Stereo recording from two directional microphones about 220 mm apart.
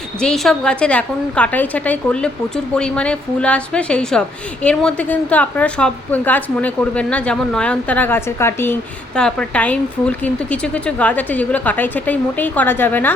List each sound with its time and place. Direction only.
0.2 s a woman's voice: 5° left (ahead or behind)